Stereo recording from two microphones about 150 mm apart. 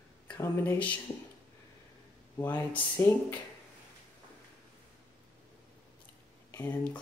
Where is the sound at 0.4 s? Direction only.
15° left (ahead or behind).